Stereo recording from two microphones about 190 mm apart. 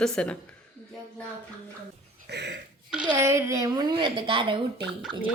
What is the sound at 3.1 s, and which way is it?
A woman's voice, 15° right (ahead or behind).